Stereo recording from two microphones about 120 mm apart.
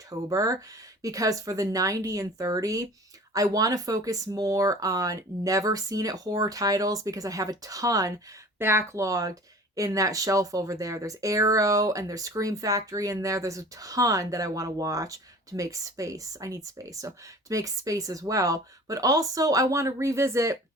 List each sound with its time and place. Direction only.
0.1 s speech: 30° right (ahead or behind)